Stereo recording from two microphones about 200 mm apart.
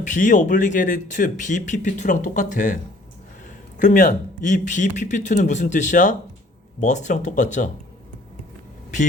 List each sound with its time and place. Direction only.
0.0 s speech: 40° left (ahead or behind)
3.8 s speech: 40° left (ahead or behind)